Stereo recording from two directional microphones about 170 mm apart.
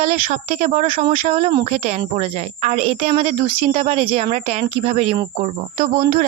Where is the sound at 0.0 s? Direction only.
40° right (ahead or behind).